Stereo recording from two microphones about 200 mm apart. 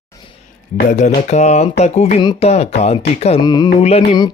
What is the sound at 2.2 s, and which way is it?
Speech, 20° left (ahead or behind).